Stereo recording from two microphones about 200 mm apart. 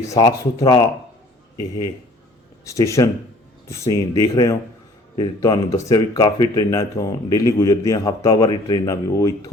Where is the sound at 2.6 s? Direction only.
15° left (ahead or behind).